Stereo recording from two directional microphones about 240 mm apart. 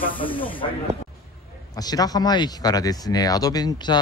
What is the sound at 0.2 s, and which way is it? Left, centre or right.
Speech, left.